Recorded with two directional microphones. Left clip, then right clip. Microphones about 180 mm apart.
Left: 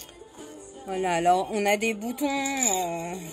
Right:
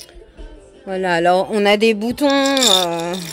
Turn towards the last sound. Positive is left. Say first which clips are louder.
# right 12 dB
turn(degrees=-60)  # may be behind; listen again after turning